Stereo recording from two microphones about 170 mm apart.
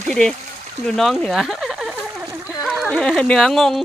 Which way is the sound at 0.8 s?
Centre (ahead or behind).